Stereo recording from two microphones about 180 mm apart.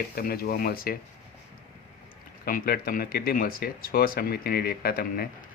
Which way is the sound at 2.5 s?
55° left (ahead or behind).